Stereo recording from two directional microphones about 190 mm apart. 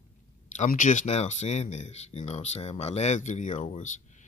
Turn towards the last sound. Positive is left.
turn(degrees=40)  # may be behind; listen again after turning